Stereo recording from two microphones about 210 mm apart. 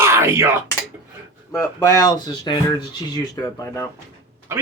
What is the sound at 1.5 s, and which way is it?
Speech, 15° left (ahead or behind).